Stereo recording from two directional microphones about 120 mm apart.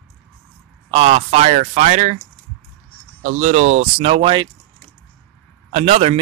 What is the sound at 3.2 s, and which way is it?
Speech, 75° right (ahead or behind).